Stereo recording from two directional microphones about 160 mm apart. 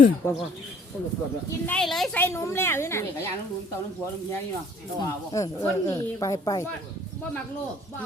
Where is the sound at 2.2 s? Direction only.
15° left (ahead or behind).